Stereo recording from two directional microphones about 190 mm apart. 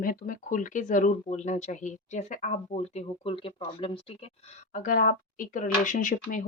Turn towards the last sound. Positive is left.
turn(degrees=45)  # may be behind; listen again after turning